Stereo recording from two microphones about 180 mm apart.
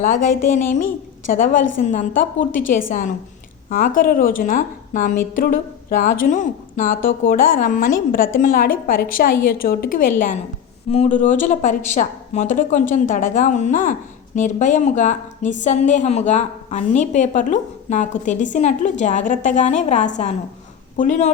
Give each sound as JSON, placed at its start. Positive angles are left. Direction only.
{"t": 0.0, "sound": "a woman's voice", "side_deg": 45}
{"t": 10.8, "sound": "a woman's voice", "side_deg": 35}